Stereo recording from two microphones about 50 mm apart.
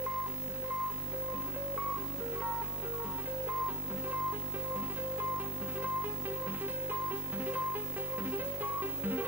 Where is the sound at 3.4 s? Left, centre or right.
Right.